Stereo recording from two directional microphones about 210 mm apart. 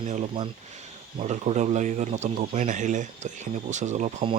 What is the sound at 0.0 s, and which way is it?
Speech, 35° right (ahead or behind).